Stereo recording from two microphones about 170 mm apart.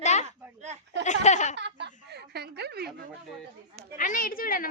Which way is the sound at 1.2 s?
45° left (ahead or behind).